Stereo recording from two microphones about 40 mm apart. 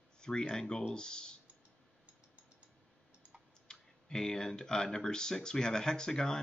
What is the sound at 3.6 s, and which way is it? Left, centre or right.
Speech, centre.